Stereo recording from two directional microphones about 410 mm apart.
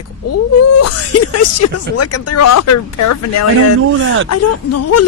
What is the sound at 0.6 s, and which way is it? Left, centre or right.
Speech, left.